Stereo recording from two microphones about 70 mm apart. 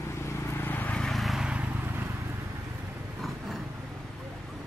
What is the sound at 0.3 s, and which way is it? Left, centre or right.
Vehicle, left.